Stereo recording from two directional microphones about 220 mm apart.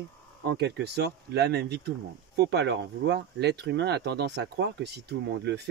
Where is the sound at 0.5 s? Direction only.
50° right (ahead or behind).